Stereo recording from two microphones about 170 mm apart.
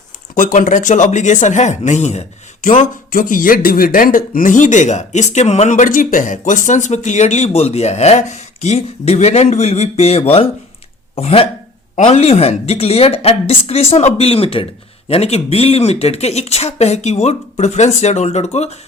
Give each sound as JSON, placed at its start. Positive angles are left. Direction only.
{"t": 0.3, "sound": "a woman's voice", "side_deg": 50}